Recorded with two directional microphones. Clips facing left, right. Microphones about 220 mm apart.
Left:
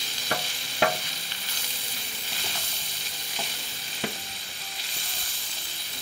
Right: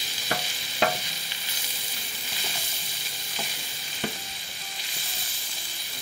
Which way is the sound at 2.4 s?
15° right (ahead or behind).